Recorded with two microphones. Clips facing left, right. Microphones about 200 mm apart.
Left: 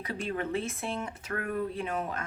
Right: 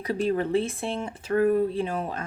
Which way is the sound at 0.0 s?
40° right (ahead or behind).